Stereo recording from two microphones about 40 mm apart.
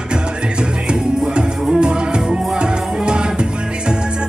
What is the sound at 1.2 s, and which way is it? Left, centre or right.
Music, right.